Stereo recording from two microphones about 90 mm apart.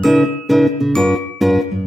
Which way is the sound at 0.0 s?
Centre (ahead or behind).